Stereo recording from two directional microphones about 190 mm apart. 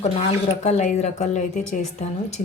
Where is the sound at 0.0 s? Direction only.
35° left (ahead or behind).